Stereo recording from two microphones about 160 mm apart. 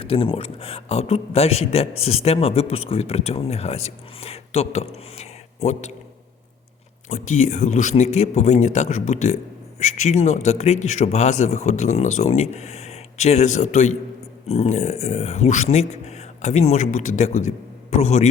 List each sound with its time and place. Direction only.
0.0 s a man's voice: 35° left (ahead or behind)
7.1 s speech: 50° left (ahead or behind)